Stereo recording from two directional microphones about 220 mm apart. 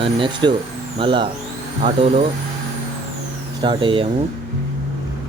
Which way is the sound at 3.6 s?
20° right (ahead or behind).